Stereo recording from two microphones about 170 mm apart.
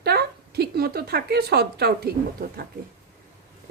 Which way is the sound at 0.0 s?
75° right (ahead or behind).